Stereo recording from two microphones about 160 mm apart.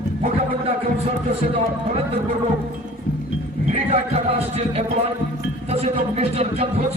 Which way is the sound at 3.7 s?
40° right (ahead or behind).